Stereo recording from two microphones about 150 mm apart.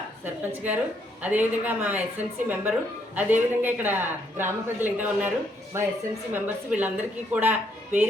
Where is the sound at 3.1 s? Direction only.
10° right (ahead or behind).